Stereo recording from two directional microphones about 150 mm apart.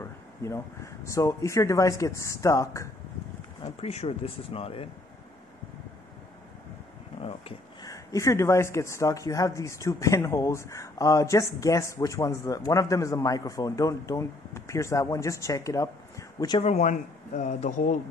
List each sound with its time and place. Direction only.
0.0 s speech: 20° left (ahead or behind)
3.6 s speech: 45° left (ahead or behind)
7.2 s a sound: 40° left (ahead or behind)
7.8 s speech: 20° left (ahead or behind)
16.6 s speech: 50° left (ahead or behind)